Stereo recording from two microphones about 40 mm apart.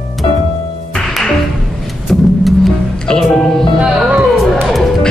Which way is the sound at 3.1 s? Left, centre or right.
Centre.